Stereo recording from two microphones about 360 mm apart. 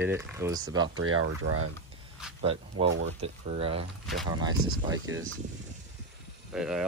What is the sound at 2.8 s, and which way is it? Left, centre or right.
Speech, right.